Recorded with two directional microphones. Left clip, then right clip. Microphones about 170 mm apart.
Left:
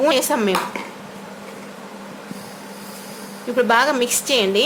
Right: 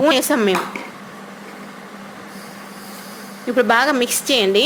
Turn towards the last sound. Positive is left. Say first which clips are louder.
# right 2 dB
turn(degrees=-20)  # may be behind; listen again after turning